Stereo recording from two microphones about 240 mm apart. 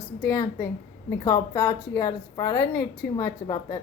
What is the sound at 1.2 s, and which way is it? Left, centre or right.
Speech, centre.